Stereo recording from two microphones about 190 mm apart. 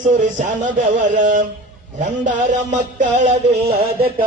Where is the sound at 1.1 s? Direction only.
45° right (ahead or behind).